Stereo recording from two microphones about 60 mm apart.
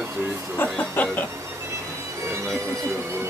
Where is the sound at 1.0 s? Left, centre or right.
Left.